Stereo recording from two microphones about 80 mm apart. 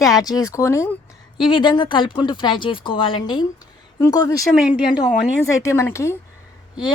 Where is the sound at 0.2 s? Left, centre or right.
Left.